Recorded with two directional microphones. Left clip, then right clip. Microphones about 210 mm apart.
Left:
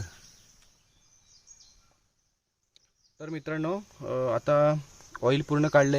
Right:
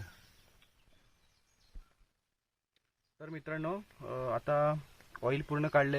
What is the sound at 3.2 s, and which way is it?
Speech, 50° left (ahead or behind).